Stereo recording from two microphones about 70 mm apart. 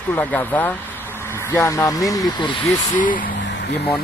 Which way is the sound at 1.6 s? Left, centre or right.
Left.